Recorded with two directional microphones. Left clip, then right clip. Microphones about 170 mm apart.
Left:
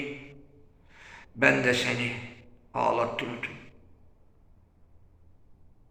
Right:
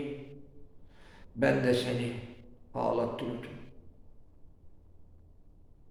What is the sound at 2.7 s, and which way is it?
Speech, 20° right (ahead or behind).